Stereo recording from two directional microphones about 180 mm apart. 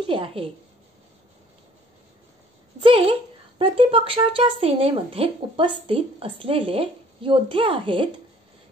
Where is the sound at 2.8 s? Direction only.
30° right (ahead or behind).